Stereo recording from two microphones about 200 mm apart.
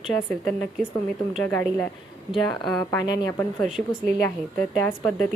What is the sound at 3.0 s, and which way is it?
Speech, 20° left (ahead or behind).